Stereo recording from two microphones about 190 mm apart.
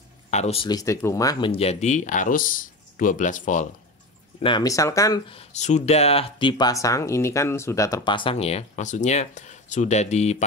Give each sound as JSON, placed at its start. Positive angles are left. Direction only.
{"t": 0.3, "sound": "speech", "side_deg": 35}
{"t": 4.4, "sound": "speech", "side_deg": 25}
{"t": 5.3, "sound": "speech", "side_deg": 35}